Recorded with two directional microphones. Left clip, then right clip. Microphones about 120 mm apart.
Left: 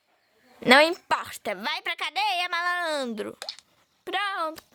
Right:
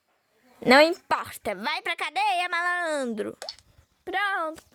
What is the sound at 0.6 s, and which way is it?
A woman's voice, 40° right (ahead or behind).